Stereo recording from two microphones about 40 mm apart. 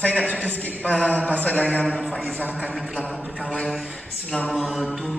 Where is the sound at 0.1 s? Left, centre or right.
Left.